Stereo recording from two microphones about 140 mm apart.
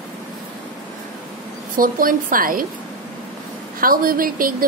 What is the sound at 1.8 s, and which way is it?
Speech, 80° right.